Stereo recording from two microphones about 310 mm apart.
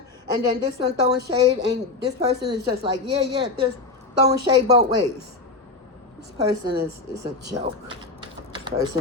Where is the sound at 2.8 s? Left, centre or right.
Centre.